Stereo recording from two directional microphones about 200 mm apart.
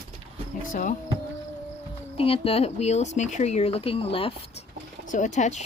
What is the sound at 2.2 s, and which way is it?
Speech, 30° left (ahead or behind).